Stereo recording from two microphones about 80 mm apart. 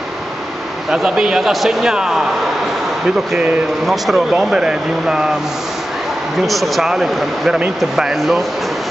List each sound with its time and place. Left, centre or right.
0.8 s speech: centre
3.8 s speech: centre
4.3 s speech: centre
6.4 s speech: centre